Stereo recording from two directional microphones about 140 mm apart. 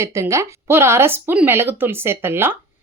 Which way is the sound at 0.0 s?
20° right (ahead or behind).